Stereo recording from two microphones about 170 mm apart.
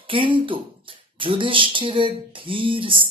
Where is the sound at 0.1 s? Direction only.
30° right (ahead or behind).